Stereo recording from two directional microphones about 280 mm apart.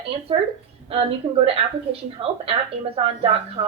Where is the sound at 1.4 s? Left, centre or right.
Centre.